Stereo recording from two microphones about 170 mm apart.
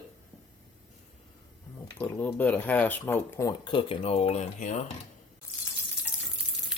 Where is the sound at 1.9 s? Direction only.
10° left (ahead or behind); by 4.8 s 40° left (ahead or behind).